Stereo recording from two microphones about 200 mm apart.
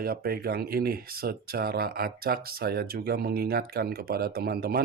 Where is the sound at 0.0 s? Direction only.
50° right (ahead or behind).